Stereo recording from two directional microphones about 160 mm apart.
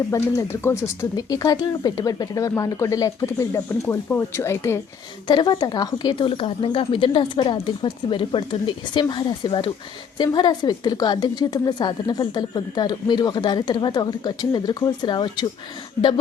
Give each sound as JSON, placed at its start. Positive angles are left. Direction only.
{"t": 0.1, "sound": "a woman's voice", "side_deg": 15}
{"t": 5.3, "sound": "a woman's voice", "side_deg": 25}